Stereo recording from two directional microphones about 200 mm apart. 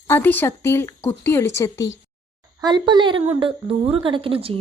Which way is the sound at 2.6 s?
20° right (ahead or behind).